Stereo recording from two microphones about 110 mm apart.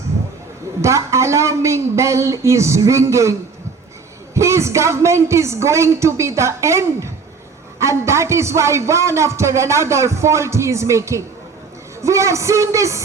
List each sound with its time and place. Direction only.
0.8 s a man's voice: 25° right (ahead or behind)
4.4 s a man's voice: 25° right (ahead or behind)